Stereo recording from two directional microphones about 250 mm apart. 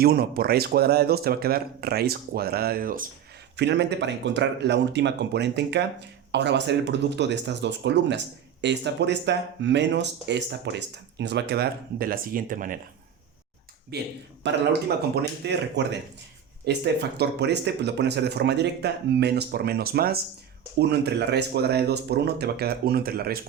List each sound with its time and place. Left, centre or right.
0.0 s speech: right
13.9 s speech: right